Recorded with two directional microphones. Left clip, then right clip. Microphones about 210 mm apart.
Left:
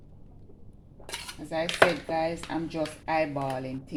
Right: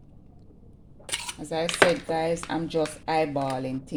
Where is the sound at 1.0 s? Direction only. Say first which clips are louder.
Right 5 dB; 35° right (ahead or behind).